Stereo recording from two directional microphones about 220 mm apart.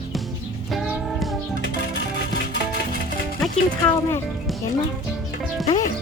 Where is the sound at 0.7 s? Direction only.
Centre (ahead or behind).